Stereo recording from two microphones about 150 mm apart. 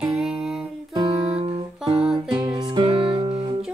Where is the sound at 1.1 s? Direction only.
40° right (ahead or behind).